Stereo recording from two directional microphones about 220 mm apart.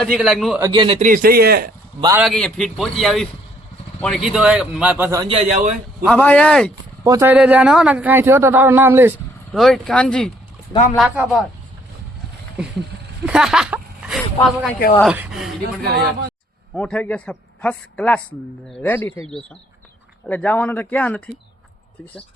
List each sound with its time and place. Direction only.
0.0 s a man's voice: centre (ahead or behind)
0.6 s a man's voice: 20° right (ahead or behind); by 1.7 s 45° right (ahead or behind)
2.0 s a man's voice: 15° right (ahead or behind)
2.2 s a man's voice: centre (ahead or behind)
5.2 s a man's voice: 25° right (ahead or behind)
6.1 s a man's voice: 5° left (ahead or behind)
7.0 s a man's voice: 15° right (ahead or behind)
9.5 s a man's voice: centre (ahead or behind)
13.2 s a sound: 5° right (ahead or behind)
15.0 s a man's voice: 5° right (ahead or behind)
15.8 s speech: 45° right (ahead or behind)
16.7 s a man's voice: 5° left (ahead or behind)
20.2 s speech: 5° left (ahead or behind)